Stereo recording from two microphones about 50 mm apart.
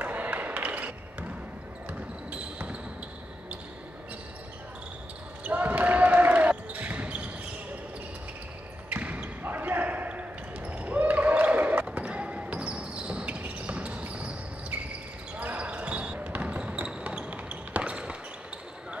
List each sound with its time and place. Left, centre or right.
0.0 s a sound: right
1.9 s basketball bounce: right
5.4 s basketball bounce: right
8.9 s basketball bounce: right